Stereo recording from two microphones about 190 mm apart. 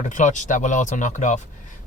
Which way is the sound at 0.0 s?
40° left (ahead or behind).